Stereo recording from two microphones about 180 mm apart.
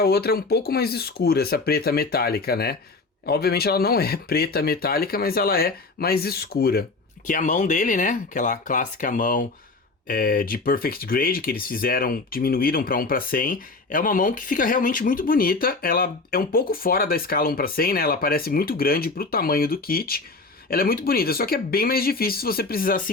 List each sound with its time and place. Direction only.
0.0 s speech: 60° left (ahead or behind)
7.3 s speech: 45° left (ahead or behind)